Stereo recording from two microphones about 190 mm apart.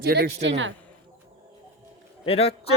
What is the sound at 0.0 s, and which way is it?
Speech, 60° right (ahead or behind).